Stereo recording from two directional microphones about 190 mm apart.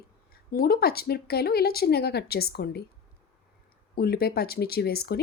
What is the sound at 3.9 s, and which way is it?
Speech, 55° left (ahead or behind).